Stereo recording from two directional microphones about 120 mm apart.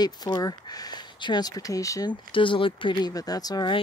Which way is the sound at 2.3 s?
45° left (ahead or behind).